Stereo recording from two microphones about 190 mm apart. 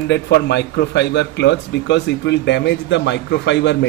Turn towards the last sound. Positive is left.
turn(degrees=65)  # may be behind; listen again after turning